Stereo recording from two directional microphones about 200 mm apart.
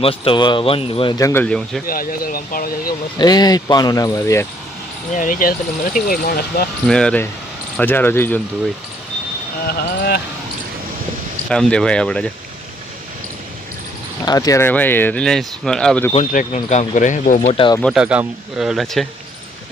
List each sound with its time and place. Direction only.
0.0 s speech: 25° left (ahead or behind)
1.2 s speech: 10° left (ahead or behind)
1.9 s speech: 45° left (ahead or behind)
3.2 s speech: 20° left (ahead or behind)
5.1 s speech: 40° left (ahead or behind)
6.8 s speech: 5° left (ahead or behind)
9.6 s speech: 50° left (ahead or behind)
11.4 s speech: 5° left (ahead or behind)
14.3 s speech: 20° left (ahead or behind)
16.1 s speech: 40° left (ahead or behind)
17.7 s speech: centre (ahead or behind)